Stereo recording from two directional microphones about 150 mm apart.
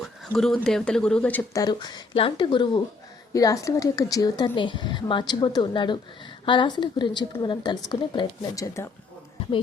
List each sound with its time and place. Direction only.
0.0 s speech: centre (ahead or behind)
1.5 s a woman's voice: 25° left (ahead or behind)
8.6 s a woman's voice: 20° left (ahead or behind)